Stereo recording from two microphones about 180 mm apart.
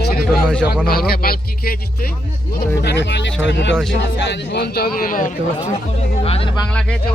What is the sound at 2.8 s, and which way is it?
Speech, 70° left (ahead or behind).